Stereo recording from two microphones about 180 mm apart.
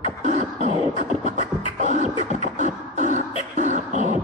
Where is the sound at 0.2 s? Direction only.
40° right (ahead or behind).